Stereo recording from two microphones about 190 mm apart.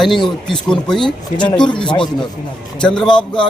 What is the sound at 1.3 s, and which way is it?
Speech, 25° left (ahead or behind).